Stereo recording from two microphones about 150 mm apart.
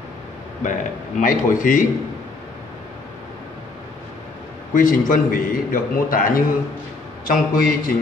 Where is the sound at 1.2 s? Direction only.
60° left (ahead or behind).